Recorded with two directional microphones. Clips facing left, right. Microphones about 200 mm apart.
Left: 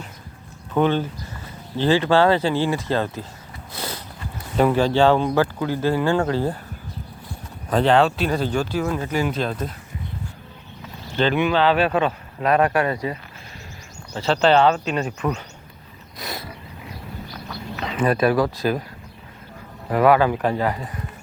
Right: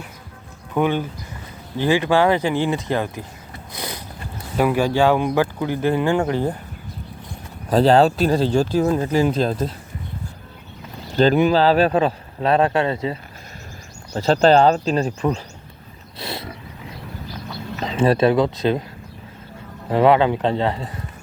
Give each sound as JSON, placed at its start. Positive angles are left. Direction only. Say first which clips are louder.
{"t": 0.7, "sound": "speech", "louder": "left 1 dB", "side_deg": -10}
{"t": 3.7, "sound": "a sound", "louder": "even", "side_deg": -15}
{"t": 4.5, "sound": "speech", "louder": "even", "side_deg": -10}
{"t": 7.7, "sound": "speech", "louder": "right 3 dB", "side_deg": -35}
{"t": 11.1, "sound": "speech", "louder": "right 4 dB", "side_deg": -40}
{"t": 14.1, "sound": "speech", "louder": "right 3 dB", "side_deg": -40}
{"t": 16.1, "sound": "wild animals", "louder": "right 2 dB", "side_deg": -25}
{"t": 17.7, "sound": "speech", "louder": "right 3 dB", "side_deg": -30}
{"t": 19.9, "sound": "a man's voice", "louder": "right 1 dB", "side_deg": -25}